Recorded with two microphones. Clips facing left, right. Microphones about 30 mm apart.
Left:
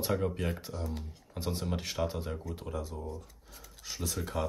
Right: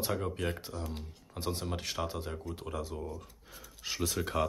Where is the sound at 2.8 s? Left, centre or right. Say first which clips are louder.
Right 1 dB; right.